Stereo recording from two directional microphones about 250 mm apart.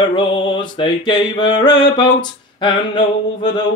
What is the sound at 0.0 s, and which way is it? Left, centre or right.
Mantra, centre.